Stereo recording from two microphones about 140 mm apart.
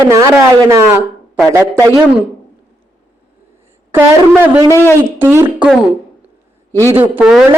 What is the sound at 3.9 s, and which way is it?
Speech, 15° right (ahead or behind).